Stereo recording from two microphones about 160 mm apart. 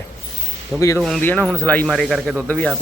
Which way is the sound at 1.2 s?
10° left (ahead or behind).